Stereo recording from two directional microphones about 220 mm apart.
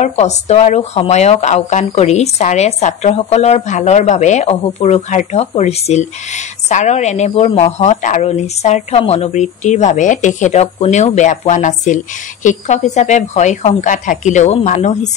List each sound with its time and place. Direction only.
0.0 s speech: 30° left (ahead or behind)